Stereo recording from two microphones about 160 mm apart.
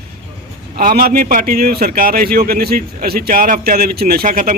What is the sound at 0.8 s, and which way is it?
A man's voice, 65° right (ahead or behind).